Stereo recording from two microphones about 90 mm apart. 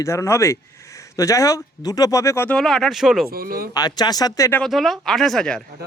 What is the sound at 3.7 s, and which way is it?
Speech, 50° left (ahead or behind).